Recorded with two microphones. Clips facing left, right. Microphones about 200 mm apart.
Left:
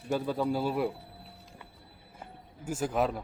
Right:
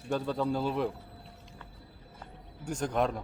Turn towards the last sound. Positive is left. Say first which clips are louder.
# left 1 dB
turn(degrees=5)  # may be behind; listen again after turning